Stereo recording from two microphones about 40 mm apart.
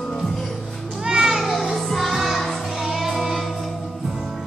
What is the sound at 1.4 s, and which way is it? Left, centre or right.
Music, centre.